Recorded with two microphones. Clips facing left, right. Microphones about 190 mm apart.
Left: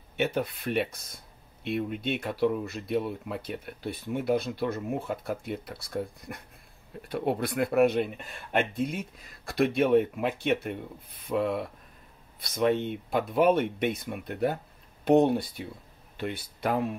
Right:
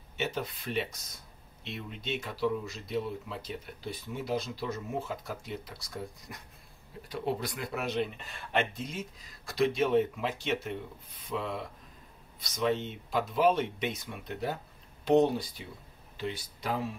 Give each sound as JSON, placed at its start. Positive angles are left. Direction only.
{"t": 0.2, "sound": "speech", "side_deg": 60}